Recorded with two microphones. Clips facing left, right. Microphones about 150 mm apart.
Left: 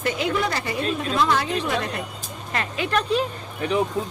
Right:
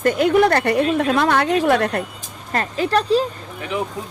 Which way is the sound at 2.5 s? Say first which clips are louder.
Right 5 dB; 40° right (ahead or behind).